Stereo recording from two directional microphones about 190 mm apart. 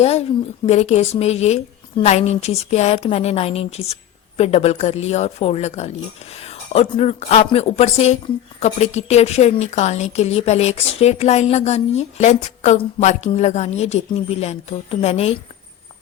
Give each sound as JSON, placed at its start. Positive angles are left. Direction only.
{"t": 0.0, "sound": "a woman's voice", "side_deg": 35}